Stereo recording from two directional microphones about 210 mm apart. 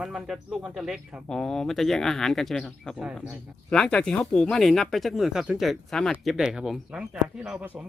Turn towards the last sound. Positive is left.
turn(degrees=-5)  # may be behind; listen again after turning